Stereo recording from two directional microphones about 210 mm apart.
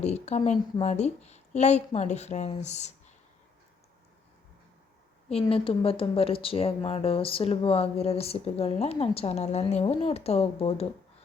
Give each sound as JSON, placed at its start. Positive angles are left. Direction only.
{"t": 0.0, "sound": "a woman's voice", "side_deg": 30}
{"t": 5.3, "sound": "speech", "side_deg": 25}